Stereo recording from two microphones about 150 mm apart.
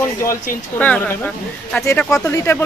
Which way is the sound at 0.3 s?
15° left (ahead or behind).